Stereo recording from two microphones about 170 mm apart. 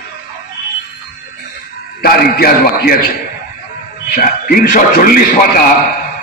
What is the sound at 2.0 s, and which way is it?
A man's voice, 60° left (ahead or behind).